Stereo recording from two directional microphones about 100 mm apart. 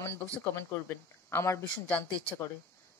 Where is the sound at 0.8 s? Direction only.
25° left (ahead or behind).